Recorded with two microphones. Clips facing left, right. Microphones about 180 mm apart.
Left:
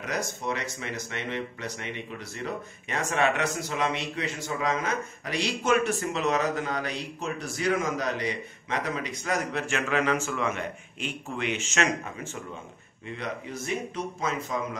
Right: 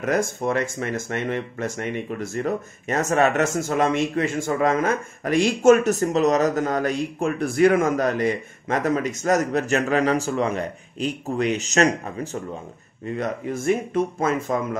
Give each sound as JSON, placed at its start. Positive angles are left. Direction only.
{"t": 0.0, "sound": "speech", "side_deg": -50}